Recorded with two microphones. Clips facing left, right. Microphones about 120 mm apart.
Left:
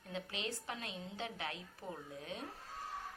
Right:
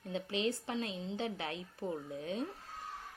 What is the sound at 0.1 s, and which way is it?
A woman's voice, 30° right (ahead or behind).